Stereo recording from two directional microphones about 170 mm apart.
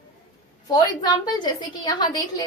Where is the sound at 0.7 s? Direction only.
25° left (ahead or behind).